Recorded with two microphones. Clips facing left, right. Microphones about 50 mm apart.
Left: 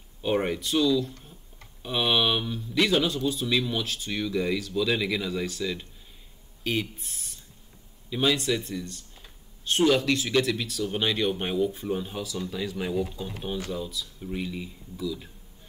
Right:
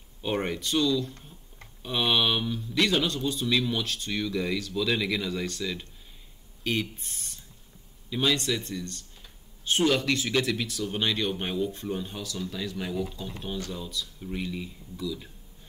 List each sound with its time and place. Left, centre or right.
0.2 s speech: centre
12.9 s speech: left
13.4 s speech: centre